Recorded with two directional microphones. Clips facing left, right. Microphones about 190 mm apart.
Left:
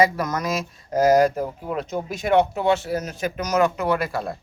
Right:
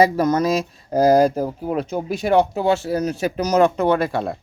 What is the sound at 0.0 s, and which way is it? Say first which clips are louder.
Speech: right 5 dB; 30° right (ahead or behind).